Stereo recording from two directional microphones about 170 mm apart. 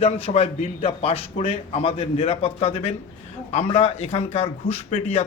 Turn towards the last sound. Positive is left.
turn(degrees=40)  # may be behind; listen again after turning